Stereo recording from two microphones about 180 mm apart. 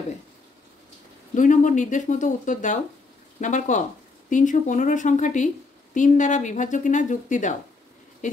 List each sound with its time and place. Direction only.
1.3 s speech: 45° left (ahead or behind)